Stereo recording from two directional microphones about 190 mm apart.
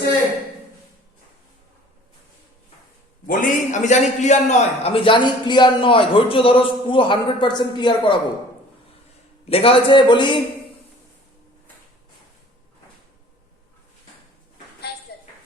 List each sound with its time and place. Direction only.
3.2 s a man's voice: 40° left (ahead or behind); by 8.2 s 25° left (ahead or behind)
9.5 s a man's voice: 30° left (ahead or behind)
14.9 s a sound: 60° left (ahead or behind)